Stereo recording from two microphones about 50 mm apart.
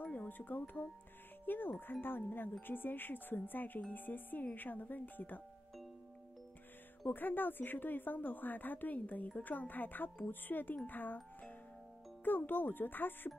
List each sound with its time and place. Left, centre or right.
0.0 s music: left
0.4 s speech: left
7.1 s speech: left